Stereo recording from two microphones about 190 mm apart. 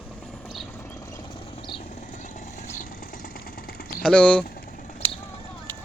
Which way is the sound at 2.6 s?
40° left (ahead or behind).